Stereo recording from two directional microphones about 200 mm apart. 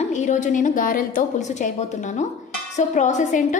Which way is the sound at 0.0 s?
35° left (ahead or behind).